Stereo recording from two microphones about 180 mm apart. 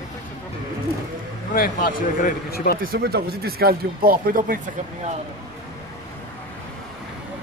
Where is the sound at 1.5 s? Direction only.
50° left (ahead or behind).